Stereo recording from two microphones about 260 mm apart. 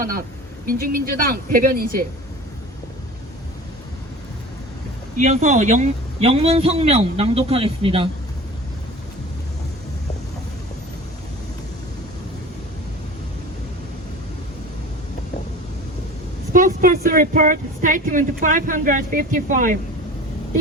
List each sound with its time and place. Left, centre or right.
0.0 s speech: right
5.1 s a man's voice: right
16.5 s speech: right